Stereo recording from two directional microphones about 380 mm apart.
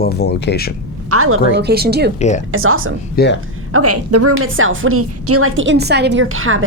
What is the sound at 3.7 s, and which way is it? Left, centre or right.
A woman's voice, right.